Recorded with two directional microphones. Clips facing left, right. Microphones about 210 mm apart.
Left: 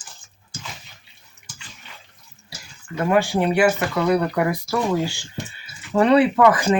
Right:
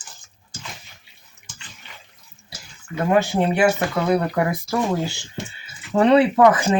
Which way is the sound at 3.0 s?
20° right (ahead or behind).